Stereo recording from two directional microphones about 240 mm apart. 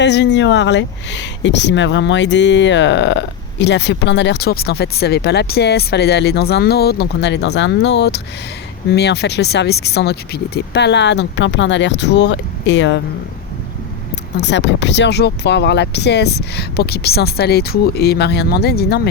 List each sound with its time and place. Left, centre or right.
0.0 s speech: left
14.3 s speech: left